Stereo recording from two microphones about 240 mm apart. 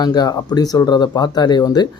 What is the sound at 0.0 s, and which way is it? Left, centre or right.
Speech, centre.